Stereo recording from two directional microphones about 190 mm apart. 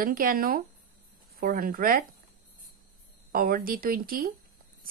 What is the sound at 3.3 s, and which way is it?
Speech, 50° right (ahead or behind).